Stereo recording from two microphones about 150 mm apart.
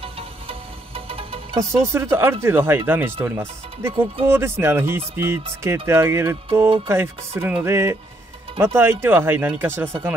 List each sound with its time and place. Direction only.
0.0 s music: 40° right (ahead or behind)
1.6 s speech: 20° right (ahead or behind)